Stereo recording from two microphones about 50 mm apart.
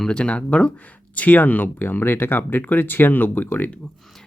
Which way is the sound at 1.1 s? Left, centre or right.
Left.